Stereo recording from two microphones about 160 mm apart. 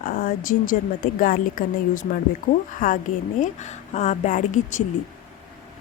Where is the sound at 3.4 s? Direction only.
45° left (ahead or behind).